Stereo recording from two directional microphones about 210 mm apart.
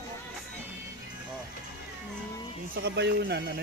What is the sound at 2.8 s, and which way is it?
Speech, 55° right (ahead or behind).